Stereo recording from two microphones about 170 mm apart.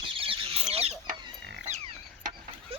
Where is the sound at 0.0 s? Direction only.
30° right (ahead or behind).